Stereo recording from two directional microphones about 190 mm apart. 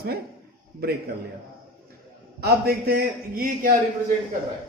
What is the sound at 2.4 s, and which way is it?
A man's voice, 55° right (ahead or behind).